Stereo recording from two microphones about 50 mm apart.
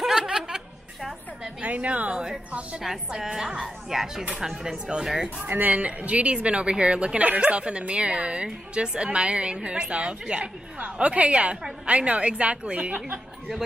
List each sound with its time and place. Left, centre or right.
0.0 s chuckle: centre
1.4 s a woman's voice: right
3.1 s speech: centre
5.5 s a woman's voice: right